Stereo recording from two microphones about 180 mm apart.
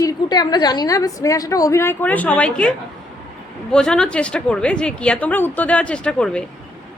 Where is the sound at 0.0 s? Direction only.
20° left (ahead or behind); by 6.4 s 5° left (ahead or behind).